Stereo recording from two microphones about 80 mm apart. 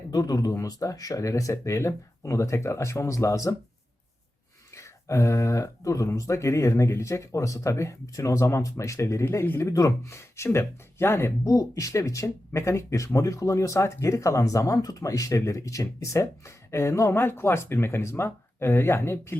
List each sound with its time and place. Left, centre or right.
0.1 s speech: left
4.7 s speech: left
9.7 s speech: left
11.4 s speech: left